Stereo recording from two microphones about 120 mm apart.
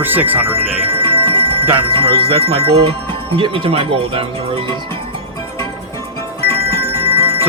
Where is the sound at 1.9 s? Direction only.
50° right (ahead or behind).